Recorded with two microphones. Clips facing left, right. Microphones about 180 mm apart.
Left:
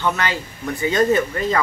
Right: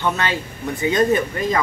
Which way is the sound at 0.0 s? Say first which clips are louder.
Even; 20° right (ahead or behind).